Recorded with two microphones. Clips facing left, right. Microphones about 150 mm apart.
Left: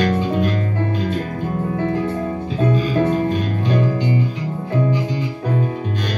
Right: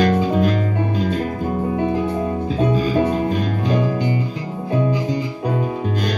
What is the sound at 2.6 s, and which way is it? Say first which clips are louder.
Music: even; 20° right (ahead or behind).